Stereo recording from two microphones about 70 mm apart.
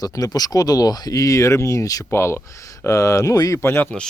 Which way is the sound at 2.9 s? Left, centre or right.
Left.